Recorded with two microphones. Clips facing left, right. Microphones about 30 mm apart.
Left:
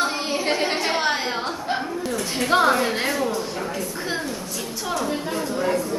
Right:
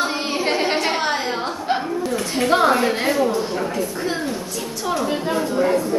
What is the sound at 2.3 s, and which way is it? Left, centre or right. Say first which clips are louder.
Speech: right 2 dB; centre.